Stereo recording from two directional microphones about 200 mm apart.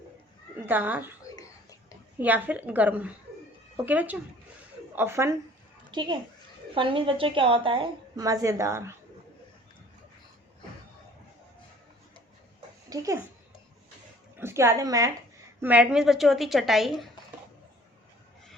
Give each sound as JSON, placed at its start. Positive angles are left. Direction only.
{"t": 0.6, "sound": "speech", "side_deg": -10}
{"t": 2.1, "sound": "a woman's voice", "side_deg": -10}
{"t": 12.9, "sound": "speech", "side_deg": -15}
{"t": 14.3, "sound": "a woman's voice", "side_deg": -10}
{"t": 15.6, "sound": "a woman's voice", "side_deg": -5}